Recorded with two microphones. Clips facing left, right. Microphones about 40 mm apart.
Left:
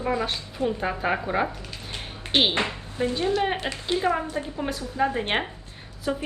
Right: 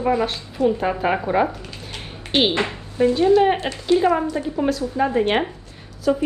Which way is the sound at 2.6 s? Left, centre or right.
Right.